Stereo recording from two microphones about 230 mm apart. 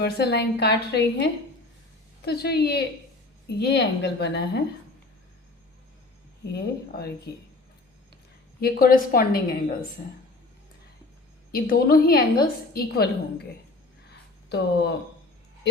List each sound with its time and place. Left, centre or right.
0.0 s a woman's voice: left
8.6 s a woman's voice: left
11.5 s a woman's voice: left
14.5 s a woman's voice: left